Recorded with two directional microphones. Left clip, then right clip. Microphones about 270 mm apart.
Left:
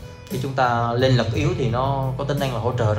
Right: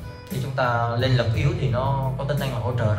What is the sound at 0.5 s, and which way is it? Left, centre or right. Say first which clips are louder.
Speech: left 3 dB; left.